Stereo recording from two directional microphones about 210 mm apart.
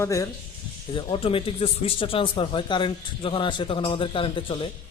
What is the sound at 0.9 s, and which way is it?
Speech, 25° left (ahead or behind).